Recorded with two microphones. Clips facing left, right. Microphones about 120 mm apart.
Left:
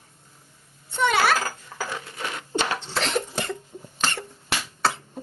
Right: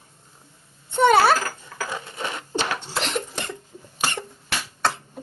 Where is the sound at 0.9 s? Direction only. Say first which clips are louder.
Right 5 dB; 40° right (ahead or behind).